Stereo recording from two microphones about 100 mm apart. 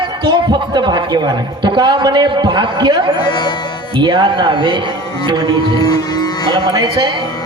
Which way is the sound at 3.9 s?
55° right (ahead or behind).